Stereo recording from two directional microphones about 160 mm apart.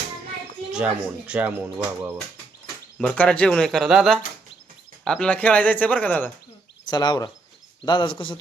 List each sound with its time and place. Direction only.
0.7 s speech: 5° right (ahead or behind)
3.0 s speech: 10° left (ahead or behind)
6.9 s speech: 25° left (ahead or behind)